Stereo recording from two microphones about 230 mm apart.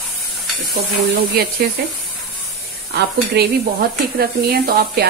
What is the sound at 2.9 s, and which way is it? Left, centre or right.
A woman's voice, right.